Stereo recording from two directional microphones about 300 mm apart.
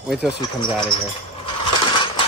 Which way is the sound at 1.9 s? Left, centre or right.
Centre.